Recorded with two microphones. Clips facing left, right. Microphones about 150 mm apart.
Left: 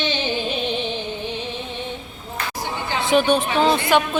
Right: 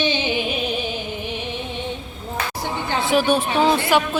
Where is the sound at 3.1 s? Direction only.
5° right (ahead or behind).